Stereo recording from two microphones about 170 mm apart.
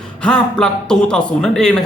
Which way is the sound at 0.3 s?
5° left (ahead or behind).